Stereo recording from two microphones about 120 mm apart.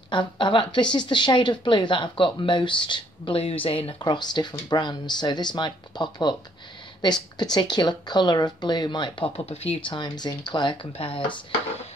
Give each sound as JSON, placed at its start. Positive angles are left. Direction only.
{"t": 0.1, "sound": "speech", "side_deg": 40}
{"t": 4.0, "sound": "speech", "side_deg": 35}
{"t": 7.5, "sound": "speech", "side_deg": 35}
{"t": 9.5, "sound": "speech", "side_deg": 55}